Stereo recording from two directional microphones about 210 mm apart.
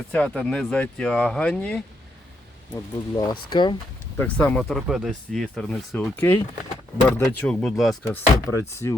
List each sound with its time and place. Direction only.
0.1 s speech: 5° left (ahead or behind)
2.7 s speech: 20° left (ahead or behind)
4.2 s speech: 5° left (ahead or behind)
8.0 s speech: 15° left (ahead or behind)